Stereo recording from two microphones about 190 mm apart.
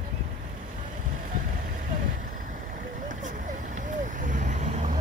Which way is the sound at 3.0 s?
40° right (ahead or behind).